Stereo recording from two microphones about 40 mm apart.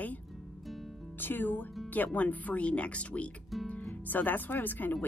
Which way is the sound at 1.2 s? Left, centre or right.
Left.